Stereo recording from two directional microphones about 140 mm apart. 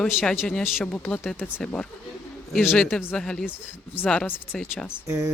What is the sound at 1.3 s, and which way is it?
Speech, centre (ahead or behind).